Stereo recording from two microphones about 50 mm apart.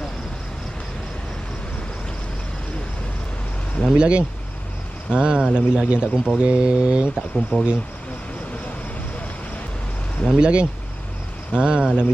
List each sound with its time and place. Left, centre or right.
3.8 s speech: centre
7.5 s speech: left
10.3 s speech: right